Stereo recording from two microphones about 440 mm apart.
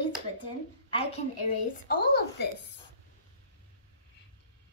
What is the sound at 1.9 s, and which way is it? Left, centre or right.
Child singing, centre.